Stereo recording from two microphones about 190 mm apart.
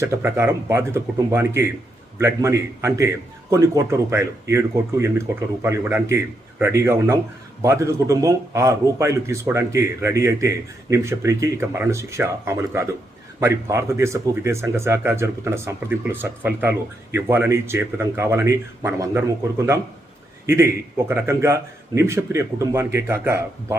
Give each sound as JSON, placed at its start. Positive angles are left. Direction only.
{"t": 0.0, "sound": "speech", "side_deg": -15}